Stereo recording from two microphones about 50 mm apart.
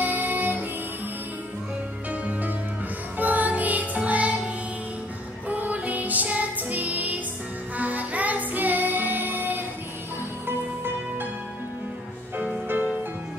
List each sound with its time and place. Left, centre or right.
0.0 s music: right
2.0 s music: right
5.5 s music: right
12.6 s music: right